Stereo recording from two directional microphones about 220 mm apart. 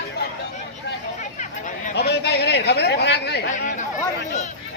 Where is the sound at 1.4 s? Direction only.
35° left (ahead or behind).